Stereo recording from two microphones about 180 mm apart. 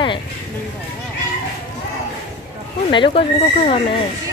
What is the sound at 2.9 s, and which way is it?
Speech, 25° left (ahead or behind).